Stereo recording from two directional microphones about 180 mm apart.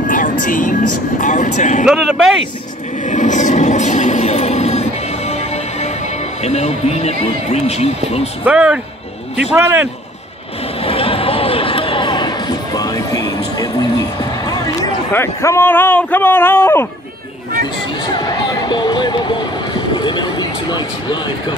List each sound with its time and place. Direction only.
0.0 s music: 45° left (ahead or behind)
1.2 s speech: 45° left (ahead or behind)
1.9 s speech: 5° right (ahead or behind)
3.1 s a sound: 45° left (ahead or behind)
6.4 s speech: 35° left (ahead or behind)
8.5 s a man's voice: 10° right (ahead or behind)
10.9 s a sound: 30° left (ahead or behind)
14.8 s a man's voice: 15° left (ahead or behind)
18.0 s music: 25° left (ahead or behind)